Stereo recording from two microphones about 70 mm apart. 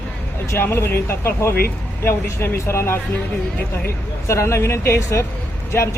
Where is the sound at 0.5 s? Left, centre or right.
Left.